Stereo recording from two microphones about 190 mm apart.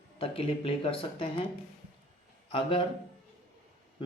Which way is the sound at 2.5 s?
25° left (ahead or behind).